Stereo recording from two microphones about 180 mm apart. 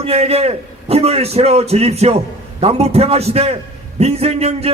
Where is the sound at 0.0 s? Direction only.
35° right (ahead or behind).